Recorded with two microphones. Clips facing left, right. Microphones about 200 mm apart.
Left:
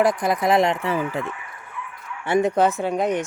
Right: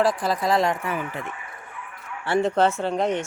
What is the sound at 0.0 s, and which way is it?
Speech, 20° left (ahead or behind).